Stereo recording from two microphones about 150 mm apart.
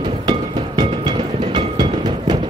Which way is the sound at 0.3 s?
30° right (ahead or behind).